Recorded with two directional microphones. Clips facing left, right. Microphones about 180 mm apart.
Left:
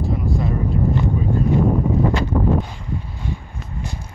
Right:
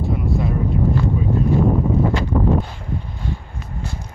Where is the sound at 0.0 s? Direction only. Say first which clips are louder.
Right 1 dB; centre (ahead or behind).